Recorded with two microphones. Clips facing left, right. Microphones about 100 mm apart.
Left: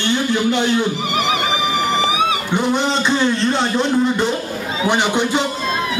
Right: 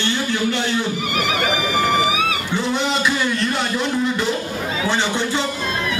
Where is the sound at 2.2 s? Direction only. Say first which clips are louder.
Left 3 dB; 20° left (ahead or behind).